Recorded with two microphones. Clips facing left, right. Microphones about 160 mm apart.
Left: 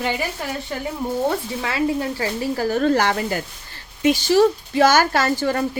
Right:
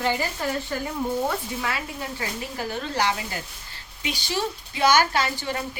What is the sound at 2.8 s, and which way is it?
Speech, 50° left (ahead or behind).